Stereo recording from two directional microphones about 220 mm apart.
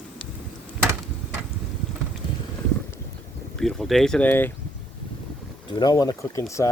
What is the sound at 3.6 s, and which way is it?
Speech, centre (ahead or behind).